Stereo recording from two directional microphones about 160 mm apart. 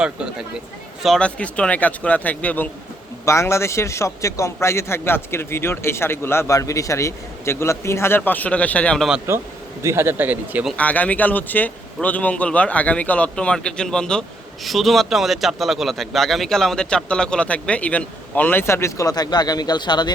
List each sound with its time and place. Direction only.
0.0 s a man's voice: 5° right (ahead or behind)
9.3 s speech: 15° right (ahead or behind)
10.8 s a man's voice: 10° left (ahead or behind); by 20.1 s 25° left (ahead or behind)